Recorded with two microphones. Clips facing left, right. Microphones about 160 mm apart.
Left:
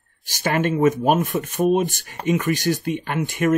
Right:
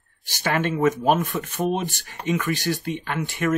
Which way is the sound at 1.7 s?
50° left (ahead or behind).